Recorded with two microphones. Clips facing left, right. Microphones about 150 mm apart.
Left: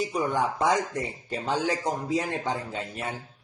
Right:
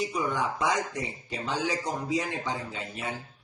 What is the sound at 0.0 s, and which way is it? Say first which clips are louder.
Speech: left 3 dB; 50° left (ahead or behind).